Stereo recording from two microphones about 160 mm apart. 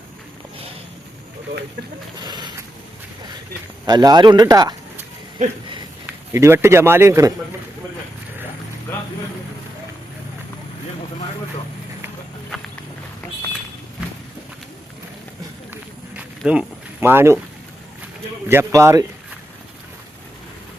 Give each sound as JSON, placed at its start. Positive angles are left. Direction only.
{"t": 2.1, "sound": "speech", "side_deg": -25}
{"t": 3.8, "sound": "speech", "side_deg": -25}
{"t": 6.1, "sound": "a man's voice", "side_deg": -15}
{"t": 16.5, "sound": "speech", "side_deg": -10}
{"t": 18.4, "sound": "a man's voice", "side_deg": -15}